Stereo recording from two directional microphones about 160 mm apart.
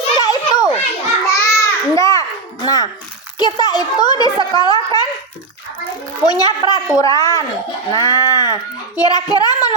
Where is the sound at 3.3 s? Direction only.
25° left (ahead or behind).